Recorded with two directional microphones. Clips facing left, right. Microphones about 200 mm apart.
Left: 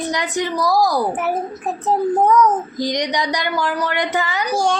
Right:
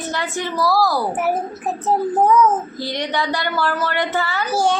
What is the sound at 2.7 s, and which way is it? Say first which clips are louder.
A woman's voice: left 3 dB; 15° left (ahead or behind).